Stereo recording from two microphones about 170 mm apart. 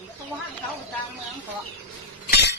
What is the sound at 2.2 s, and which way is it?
Chink, 80° left.